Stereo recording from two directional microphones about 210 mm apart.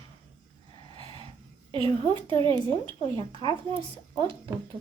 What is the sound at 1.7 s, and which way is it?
A woman's voice, 25° right (ahead or behind).